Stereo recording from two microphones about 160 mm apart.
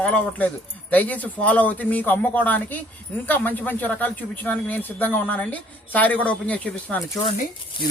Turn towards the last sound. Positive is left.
turn(degrees=30)  # may be behind; listen again after turning